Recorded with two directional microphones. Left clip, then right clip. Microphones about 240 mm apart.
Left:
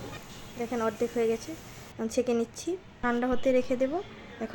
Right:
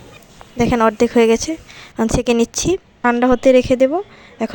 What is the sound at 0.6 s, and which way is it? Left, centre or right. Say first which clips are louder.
A woman's voice: right 15 dB; right.